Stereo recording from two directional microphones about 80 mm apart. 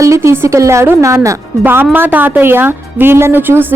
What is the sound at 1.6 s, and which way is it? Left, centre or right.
A woman's voice, right.